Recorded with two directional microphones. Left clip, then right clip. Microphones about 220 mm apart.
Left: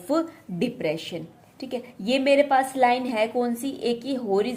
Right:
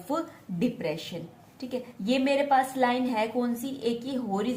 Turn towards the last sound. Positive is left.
turn(degrees=45)  # may be behind; listen again after turning